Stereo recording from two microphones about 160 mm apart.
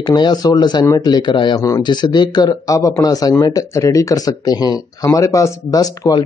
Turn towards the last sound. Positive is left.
turn(degrees=25)  # may be behind; listen again after turning